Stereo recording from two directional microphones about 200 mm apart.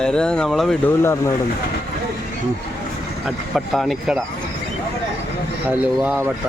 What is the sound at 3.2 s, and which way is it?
Speech, centre (ahead or behind).